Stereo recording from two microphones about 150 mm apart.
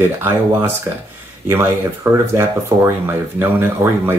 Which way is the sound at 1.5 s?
15° right (ahead or behind).